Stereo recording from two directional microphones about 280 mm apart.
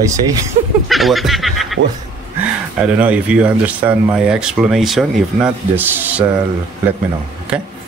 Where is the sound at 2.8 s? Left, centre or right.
Centre.